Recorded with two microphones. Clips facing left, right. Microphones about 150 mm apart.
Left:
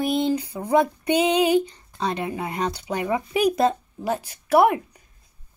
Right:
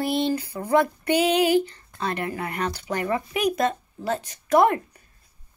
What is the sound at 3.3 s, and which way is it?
Speech, 30° left (ahead or behind).